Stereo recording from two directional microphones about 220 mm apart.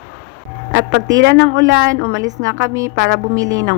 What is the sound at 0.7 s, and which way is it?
A woman's voice, 55° right (ahead or behind).